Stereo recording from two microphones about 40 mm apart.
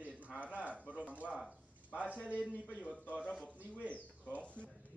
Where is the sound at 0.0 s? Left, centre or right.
Right.